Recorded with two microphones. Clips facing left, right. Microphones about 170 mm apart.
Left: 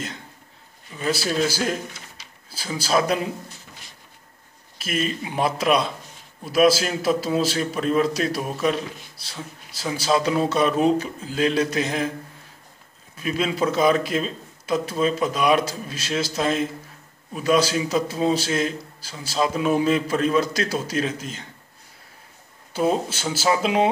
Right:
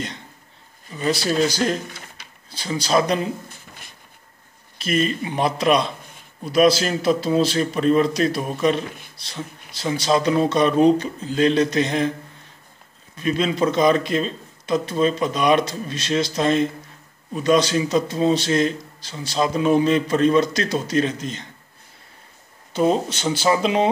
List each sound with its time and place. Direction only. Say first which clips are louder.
0.9 s speech: right 3 dB; 5° left (ahead or behind)
2.2 s a sound: right 2 dB; 55° right (ahead or behind)
2.5 s a man's voice: right 2 dB; 5° left (ahead or behind)
3.4 s a sound: right 1 dB; 55° right (ahead or behind)
4.7 s a man's voice: right 4 dB; 5° left (ahead or behind)
13.2 s a man's voice: right 3 dB; 5° left (ahead or behind)
22.7 s a man's voice: right 3 dB; 5° left (ahead or behind)